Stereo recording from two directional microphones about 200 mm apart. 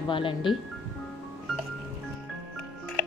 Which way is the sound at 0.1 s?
25° left (ahead or behind).